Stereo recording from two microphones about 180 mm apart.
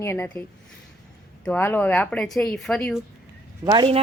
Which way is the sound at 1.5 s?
10° left (ahead or behind).